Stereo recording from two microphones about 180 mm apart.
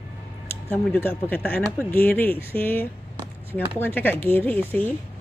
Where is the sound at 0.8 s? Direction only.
10° left (ahead or behind).